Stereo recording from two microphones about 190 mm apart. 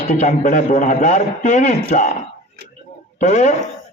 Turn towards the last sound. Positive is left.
turn(degrees=40)  # may be behind; listen again after turning